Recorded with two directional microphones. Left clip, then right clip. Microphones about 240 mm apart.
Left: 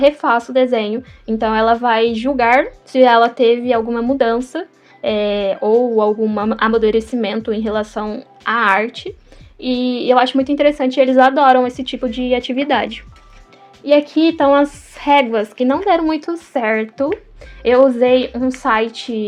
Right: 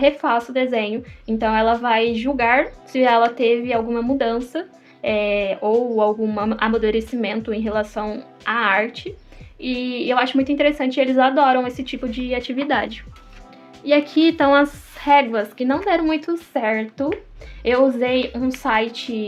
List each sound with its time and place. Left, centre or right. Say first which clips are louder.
0.0 s a woman's voice: left 4 dB; left